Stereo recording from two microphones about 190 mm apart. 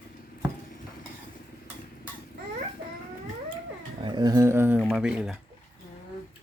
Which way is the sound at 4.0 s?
25° right (ahead or behind).